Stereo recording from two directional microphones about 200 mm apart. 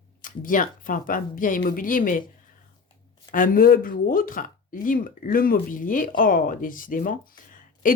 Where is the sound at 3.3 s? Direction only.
45° left (ahead or behind).